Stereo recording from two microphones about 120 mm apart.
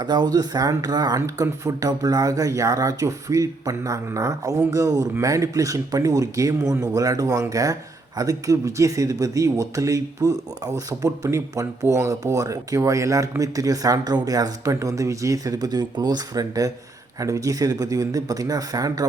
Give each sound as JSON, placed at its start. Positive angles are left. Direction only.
{"t": 0.0, "sound": "speech", "side_deg": -35}